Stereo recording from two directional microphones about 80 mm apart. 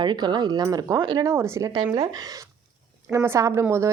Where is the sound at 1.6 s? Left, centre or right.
Right.